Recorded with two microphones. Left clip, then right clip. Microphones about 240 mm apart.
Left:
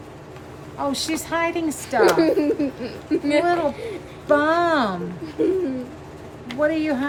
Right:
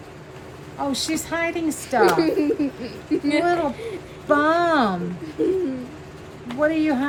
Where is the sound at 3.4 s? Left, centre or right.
Centre.